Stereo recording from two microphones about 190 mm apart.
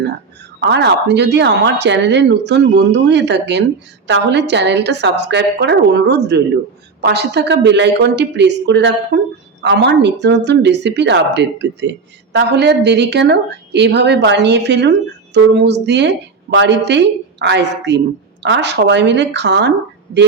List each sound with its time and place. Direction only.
0.6 s speech: 65° right (ahead or behind)